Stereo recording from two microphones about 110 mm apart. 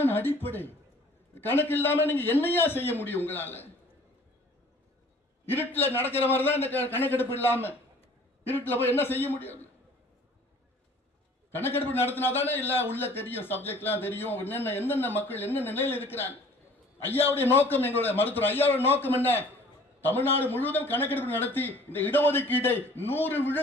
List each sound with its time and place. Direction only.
0.0 s a man's voice: 20° left (ahead or behind)
5.5 s a man's voice: 20° left (ahead or behind)
11.5 s a man's voice: 20° left (ahead or behind)